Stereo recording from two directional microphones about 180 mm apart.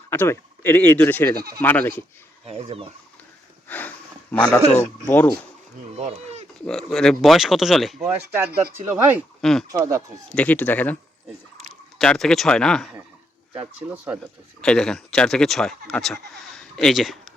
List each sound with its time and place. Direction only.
0.1 s speech: 10° left (ahead or behind)
2.5 s speech: 35° right (ahead or behind)
3.7 s sniff: 10° left (ahead or behind)
5.0 s speech: 10° left (ahead or behind)
6.0 s a sound: 35° right (ahead or behind)
6.7 s speech: centre (ahead or behind)
9.4 s speech: centre (ahead or behind)
9.7 s speech: 20° right (ahead or behind)
10.3 s speech: 10° left (ahead or behind)
13.8 s speech: 10° right (ahead or behind)
14.6 s speech: 5° left (ahead or behind)